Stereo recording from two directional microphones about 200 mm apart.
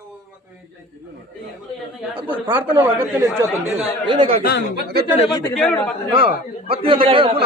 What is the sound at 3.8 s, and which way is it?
Speech, 25° right (ahead or behind).